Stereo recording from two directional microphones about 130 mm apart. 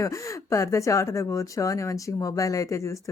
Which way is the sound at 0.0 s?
25° left (ahead or behind).